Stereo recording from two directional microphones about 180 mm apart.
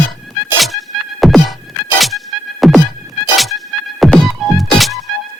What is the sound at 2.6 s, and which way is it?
Music, centre (ahead or behind).